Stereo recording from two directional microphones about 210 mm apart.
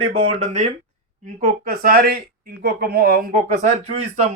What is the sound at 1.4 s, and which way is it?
Speech, 45° right (ahead or behind).